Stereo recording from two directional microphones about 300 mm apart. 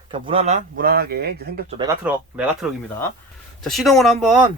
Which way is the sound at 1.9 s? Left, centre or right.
Centre.